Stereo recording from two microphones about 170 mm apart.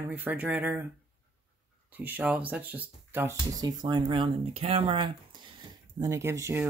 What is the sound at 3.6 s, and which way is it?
Speech, 25° right (ahead or behind).